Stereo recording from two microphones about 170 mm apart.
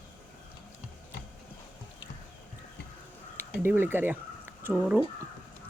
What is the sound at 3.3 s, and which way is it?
Speech, 15° right (ahead or behind).